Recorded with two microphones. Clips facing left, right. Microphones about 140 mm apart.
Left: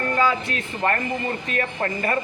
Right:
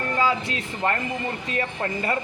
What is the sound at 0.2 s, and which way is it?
Speech, 25° right (ahead or behind).